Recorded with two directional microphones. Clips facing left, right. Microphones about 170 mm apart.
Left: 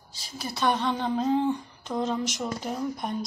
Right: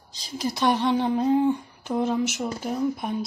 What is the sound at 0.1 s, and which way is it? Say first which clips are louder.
Speech: right 7 dB; 15° right (ahead or behind).